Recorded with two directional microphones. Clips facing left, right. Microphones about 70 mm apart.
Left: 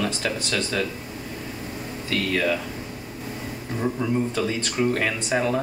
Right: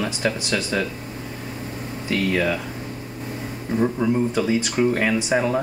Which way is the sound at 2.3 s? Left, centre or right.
Centre.